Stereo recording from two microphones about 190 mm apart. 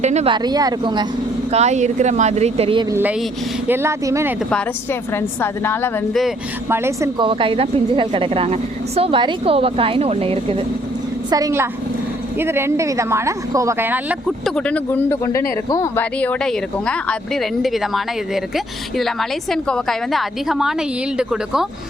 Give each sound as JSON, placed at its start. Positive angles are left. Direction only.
{"t": 0.0, "sound": "speech", "side_deg": -35}
{"t": 0.3, "sound": "a woman's voice", "side_deg": -20}
{"t": 1.5, "sound": "speech", "side_deg": -35}
{"t": 2.9, "sound": "a woman's voice", "side_deg": -10}
{"t": 4.5, "sound": "a woman's voice", "side_deg": 10}
{"t": 6.7, "sound": "a woman's voice", "side_deg": -15}
{"t": 7.2, "sound": "a woman's voice", "side_deg": -25}
{"t": 11.3, "sound": "a woman's voice", "side_deg": -20}